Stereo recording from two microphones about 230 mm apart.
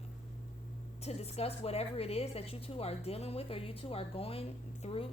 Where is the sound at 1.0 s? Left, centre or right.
Left.